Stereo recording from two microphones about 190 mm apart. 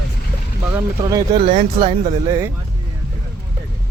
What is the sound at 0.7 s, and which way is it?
Speech, 20° right (ahead or behind).